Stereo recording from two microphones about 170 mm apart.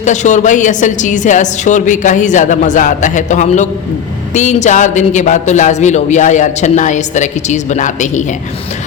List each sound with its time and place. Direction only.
0.0 s speech: 45° left (ahead or behind)